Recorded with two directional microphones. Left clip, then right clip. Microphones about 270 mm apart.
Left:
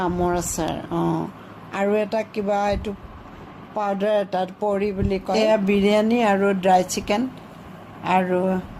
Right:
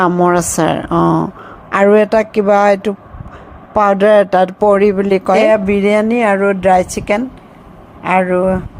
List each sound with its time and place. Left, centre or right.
0.0 s a woman's voice: right
5.4 s a woman's voice: centre